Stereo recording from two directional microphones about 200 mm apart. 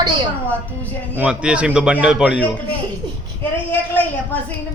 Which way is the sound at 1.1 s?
5° right (ahead or behind).